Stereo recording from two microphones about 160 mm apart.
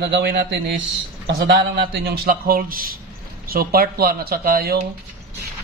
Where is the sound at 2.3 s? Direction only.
65° right (ahead or behind).